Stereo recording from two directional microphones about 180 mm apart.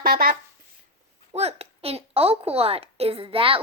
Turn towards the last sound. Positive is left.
turn(degrees=-30)  # may be behind; listen again after turning